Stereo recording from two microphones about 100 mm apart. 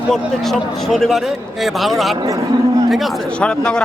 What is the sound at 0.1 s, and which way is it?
Speech, 5° left (ahead or behind).